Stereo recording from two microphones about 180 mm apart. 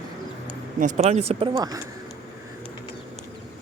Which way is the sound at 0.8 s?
40° right (ahead or behind).